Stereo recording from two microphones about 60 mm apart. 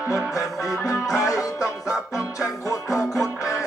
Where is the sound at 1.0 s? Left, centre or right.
Left.